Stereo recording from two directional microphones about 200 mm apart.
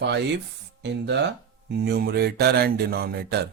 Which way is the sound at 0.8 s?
60° right (ahead or behind).